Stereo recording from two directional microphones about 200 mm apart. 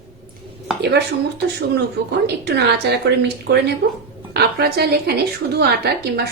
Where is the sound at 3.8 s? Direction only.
55° right (ahead or behind).